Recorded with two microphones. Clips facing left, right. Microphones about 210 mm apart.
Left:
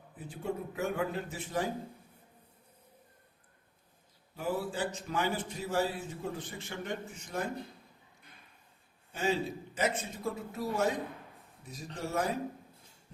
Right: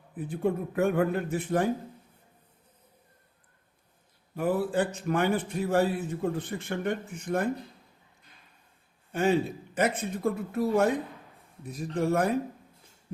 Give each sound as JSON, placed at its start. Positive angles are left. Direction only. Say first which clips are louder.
{"t": 0.2, "sound": "a man's voice", "louder": "right 8 dB", "side_deg": -55}
{"t": 4.4, "sound": "a man's voice", "louder": "right 7 dB", "side_deg": -55}
{"t": 9.1, "sound": "a man's voice", "louder": "right 7 dB", "side_deg": -60}